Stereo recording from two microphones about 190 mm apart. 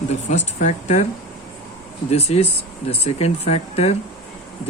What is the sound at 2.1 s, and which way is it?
Speech, 35° left (ahead or behind).